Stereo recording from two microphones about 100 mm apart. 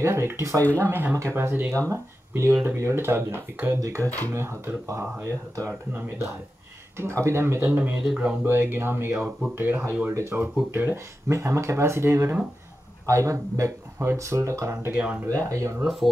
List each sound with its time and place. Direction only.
0.0 s speech: 25° right (ahead or behind); by 8.4 s 5° right (ahead or behind)
8.5 s a man's voice: 20° right (ahead or behind)
15.2 s a man's voice: 35° right (ahead or behind)
15.8 s speech: centre (ahead or behind)